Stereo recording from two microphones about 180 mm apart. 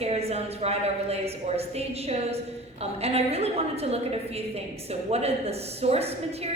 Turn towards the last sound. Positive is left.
turn(degrees=-35)  # may be behind; listen again after turning